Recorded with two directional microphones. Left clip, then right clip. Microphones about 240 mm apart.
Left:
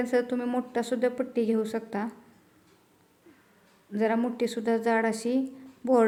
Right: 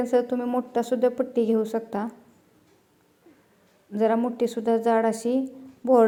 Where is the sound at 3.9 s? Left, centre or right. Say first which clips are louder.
Right 4 dB; centre.